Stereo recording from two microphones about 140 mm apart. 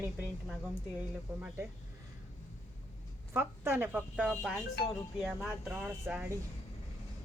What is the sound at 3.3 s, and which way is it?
Speech, 15° right (ahead or behind).